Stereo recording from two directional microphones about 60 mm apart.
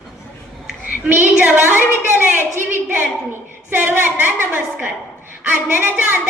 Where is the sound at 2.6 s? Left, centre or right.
Right.